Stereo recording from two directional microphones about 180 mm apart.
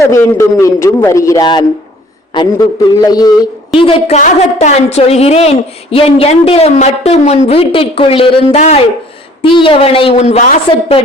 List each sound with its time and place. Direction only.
0.0 s a man's voice: 15° left (ahead or behind); by 11.0 s 35° left (ahead or behind)